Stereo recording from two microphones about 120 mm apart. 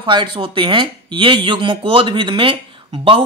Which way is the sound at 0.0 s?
40° right (ahead or behind).